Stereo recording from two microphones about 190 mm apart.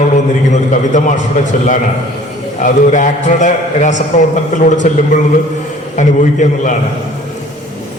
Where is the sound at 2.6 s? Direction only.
40° left (ahead or behind).